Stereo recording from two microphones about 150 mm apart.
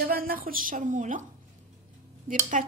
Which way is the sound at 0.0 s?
80° right.